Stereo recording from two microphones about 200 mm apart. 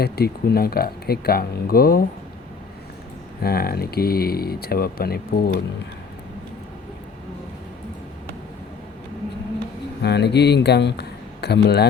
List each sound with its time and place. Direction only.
0.0 s speech: 50° left (ahead or behind)
3.4 s speech: 50° left (ahead or behind)
10.0 s speech: 55° left (ahead or behind)